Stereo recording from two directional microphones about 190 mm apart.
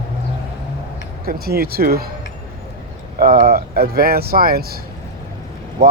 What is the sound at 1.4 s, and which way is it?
Speech, 55° right (ahead or behind).